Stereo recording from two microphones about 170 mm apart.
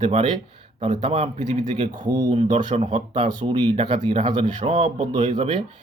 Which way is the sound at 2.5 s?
40° right (ahead or behind).